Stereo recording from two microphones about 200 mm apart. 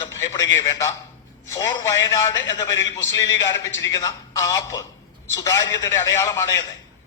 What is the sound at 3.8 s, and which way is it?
Speech, 15° left (ahead or behind).